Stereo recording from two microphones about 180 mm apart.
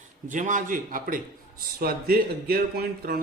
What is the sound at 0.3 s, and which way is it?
A man's voice, 45° right (ahead or behind).